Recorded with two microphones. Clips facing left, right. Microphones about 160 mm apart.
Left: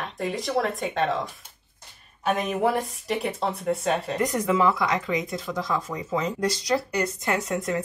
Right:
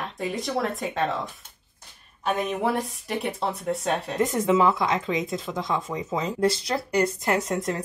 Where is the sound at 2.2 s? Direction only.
Centre (ahead or behind).